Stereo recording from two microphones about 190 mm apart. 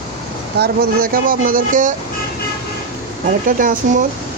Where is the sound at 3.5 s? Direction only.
45° right (ahead or behind).